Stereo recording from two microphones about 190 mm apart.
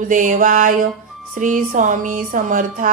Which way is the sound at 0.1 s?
45° right (ahead or behind).